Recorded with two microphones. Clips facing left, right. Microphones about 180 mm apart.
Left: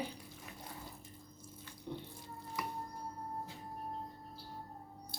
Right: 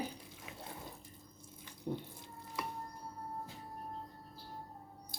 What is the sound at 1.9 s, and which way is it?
Speech, 45° right (ahead or behind).